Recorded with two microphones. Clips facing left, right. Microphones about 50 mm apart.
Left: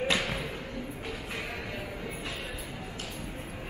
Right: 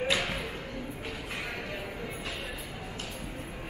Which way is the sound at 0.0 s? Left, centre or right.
Centre.